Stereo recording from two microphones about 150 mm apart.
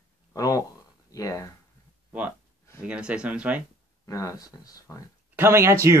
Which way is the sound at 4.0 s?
20° left (ahead or behind).